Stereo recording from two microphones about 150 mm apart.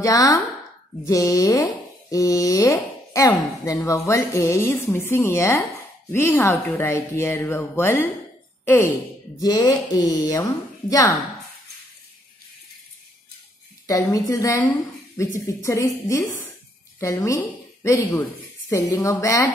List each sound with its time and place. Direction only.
0.0 s speech: 25° left (ahead or behind)
13.8 s a woman's voice: 20° left (ahead or behind)